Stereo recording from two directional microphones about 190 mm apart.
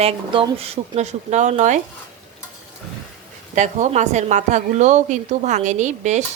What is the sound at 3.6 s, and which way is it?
A woman's voice, 40° right (ahead or behind).